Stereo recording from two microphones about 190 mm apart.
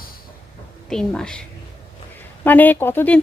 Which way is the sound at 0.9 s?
5° left (ahead or behind).